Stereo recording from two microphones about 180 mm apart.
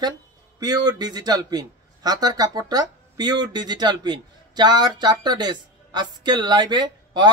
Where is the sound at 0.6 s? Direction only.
20° right (ahead or behind).